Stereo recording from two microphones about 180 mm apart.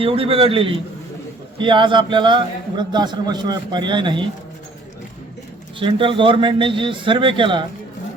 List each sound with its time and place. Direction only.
0.0 s a man's voice: 30° right (ahead or behind)
5.8 s a man's voice: 30° right (ahead or behind)